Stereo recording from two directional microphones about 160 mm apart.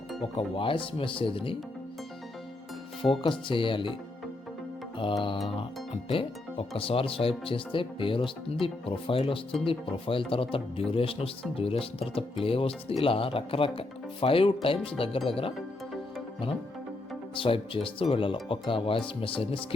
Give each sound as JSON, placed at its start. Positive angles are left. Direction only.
{"t": 0.2, "sound": "speech", "side_deg": 35}
{"t": 3.0, "sound": "speech", "side_deg": 30}
{"t": 5.5, "sound": "speech", "side_deg": 35}
{"t": 17.3, "sound": "speech", "side_deg": 35}